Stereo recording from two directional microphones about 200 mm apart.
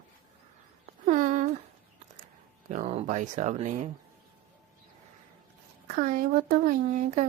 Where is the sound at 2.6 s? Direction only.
40° right (ahead or behind).